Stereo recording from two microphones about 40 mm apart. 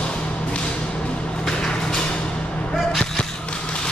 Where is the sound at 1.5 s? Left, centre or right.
Centre.